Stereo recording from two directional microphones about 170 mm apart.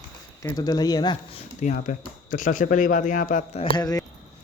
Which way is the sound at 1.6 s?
50° left (ahead or behind).